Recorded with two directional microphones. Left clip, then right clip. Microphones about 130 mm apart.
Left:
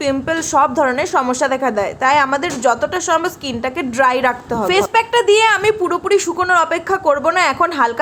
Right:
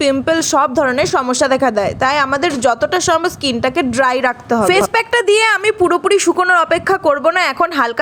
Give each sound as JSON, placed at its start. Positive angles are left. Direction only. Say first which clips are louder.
{"t": 0.0, "sound": "a woman's voice", "louder": "right 4 dB", "side_deg": -35}